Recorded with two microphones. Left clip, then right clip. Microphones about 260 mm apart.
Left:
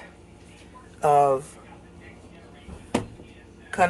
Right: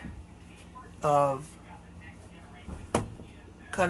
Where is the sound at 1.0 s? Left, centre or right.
Centre.